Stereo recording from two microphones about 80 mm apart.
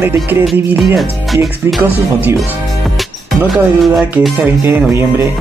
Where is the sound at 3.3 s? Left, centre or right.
Centre.